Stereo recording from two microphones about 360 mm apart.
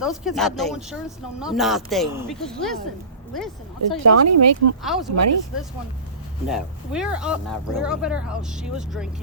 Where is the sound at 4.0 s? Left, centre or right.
Right.